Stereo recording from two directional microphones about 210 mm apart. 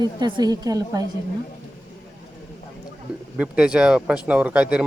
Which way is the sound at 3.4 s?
5° right (ahead or behind).